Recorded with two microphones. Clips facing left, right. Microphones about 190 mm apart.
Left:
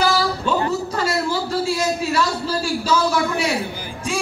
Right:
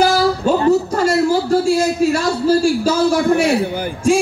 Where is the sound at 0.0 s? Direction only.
50° right (ahead or behind).